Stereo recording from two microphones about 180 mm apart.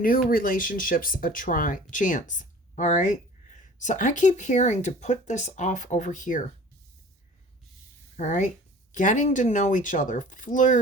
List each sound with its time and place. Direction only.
0.0 s speech: 50° left (ahead or behind)
8.1 s speech: 45° left (ahead or behind)